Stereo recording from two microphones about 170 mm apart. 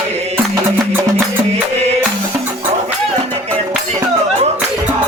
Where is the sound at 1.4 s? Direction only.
40° right (ahead or behind).